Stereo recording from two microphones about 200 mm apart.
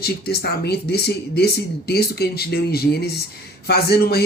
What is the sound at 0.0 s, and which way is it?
Speech, 50° left (ahead or behind).